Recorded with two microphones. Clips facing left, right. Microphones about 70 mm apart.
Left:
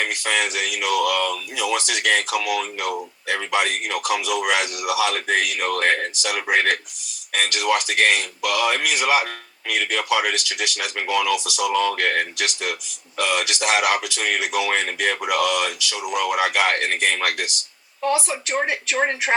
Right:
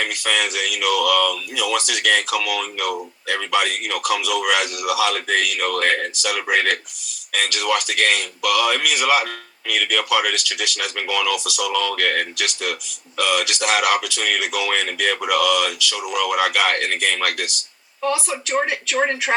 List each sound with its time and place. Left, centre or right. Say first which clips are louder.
0.0 s a man's voice: even; left